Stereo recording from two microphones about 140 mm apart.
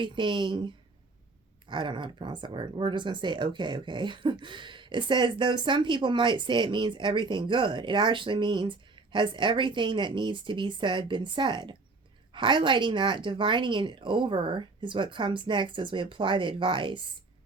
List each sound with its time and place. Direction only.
0.0 s speech: 35° right (ahead or behind)
1.7 s speech: 35° right (ahead or behind)